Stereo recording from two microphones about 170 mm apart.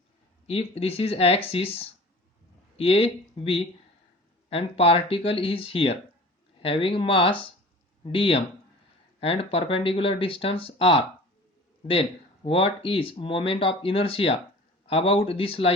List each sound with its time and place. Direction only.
0.4 s speech: 35° left (ahead or behind)